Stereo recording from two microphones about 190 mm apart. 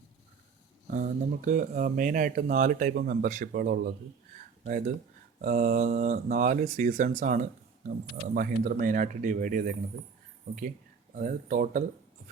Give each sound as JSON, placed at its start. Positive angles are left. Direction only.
{"t": 0.9, "sound": "speech", "side_deg": -45}
{"t": 5.4, "sound": "speech", "side_deg": -45}
{"t": 11.1, "sound": "speech", "side_deg": -45}